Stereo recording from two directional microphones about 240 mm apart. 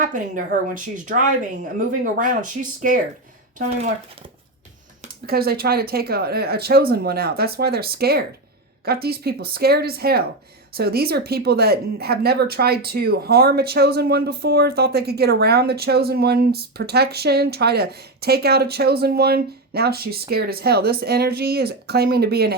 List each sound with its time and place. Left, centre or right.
0.0 s speech: right
5.2 s speech: right